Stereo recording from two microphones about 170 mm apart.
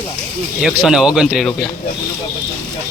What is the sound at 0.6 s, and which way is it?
Speech, 5° right (ahead or behind).